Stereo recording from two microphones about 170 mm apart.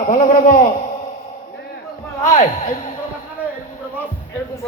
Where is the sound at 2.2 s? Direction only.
50° left (ahead or behind).